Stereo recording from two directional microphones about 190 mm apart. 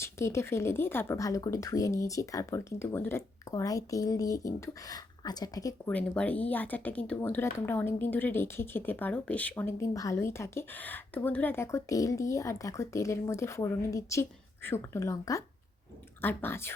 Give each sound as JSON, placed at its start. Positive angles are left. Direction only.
{"t": 0.0, "sound": "speech", "side_deg": 15}
{"t": 5.9, "sound": "speech", "side_deg": 5}